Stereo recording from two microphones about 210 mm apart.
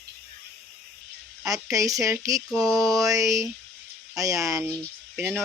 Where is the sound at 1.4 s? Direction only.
15° right (ahead or behind).